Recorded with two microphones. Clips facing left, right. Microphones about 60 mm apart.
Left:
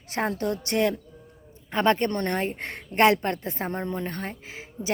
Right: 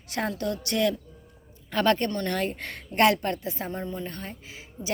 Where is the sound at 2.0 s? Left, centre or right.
Left.